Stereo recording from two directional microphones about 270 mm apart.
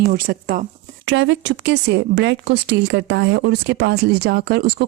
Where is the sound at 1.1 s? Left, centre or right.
Right.